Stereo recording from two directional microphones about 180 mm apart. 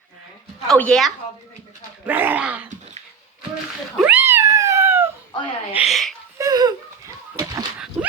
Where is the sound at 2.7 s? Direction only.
40° right (ahead or behind).